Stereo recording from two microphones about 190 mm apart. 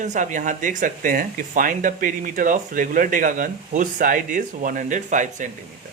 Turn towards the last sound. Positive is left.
turn(degrees=-40)  # may be behind; listen again after turning